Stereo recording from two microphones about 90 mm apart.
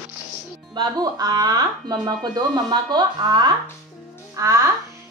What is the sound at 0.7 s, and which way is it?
Speech, 50° right (ahead or behind).